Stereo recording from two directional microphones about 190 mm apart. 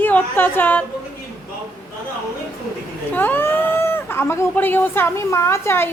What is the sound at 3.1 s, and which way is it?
Speech, 10° left (ahead or behind).